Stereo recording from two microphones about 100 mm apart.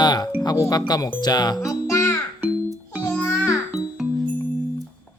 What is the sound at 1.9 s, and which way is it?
Music, 30° left (ahead or behind).